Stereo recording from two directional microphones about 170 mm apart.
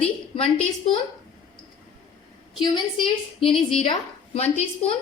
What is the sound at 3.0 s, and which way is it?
Speech, 30° left (ahead or behind).